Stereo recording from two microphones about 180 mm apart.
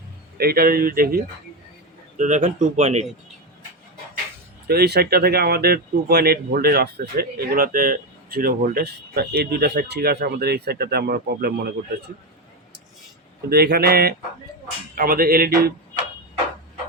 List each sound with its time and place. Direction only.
0.3 s speech: 60° right (ahead or behind); by 3.1 s 40° right (ahead or behind)
4.7 s speech: 60° right (ahead or behind)
13.5 s speech: 65° right (ahead or behind)